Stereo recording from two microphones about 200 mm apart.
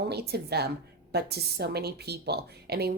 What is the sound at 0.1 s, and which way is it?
A woman's voice, 55° right (ahead or behind).